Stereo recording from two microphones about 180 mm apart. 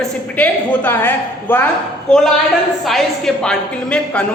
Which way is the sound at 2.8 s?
Centre (ahead or behind).